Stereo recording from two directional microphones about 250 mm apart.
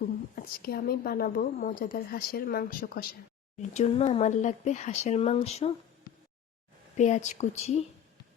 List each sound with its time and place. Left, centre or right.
0.3 s a woman's voice: left
3.6 s speech: left
6.9 s speech: left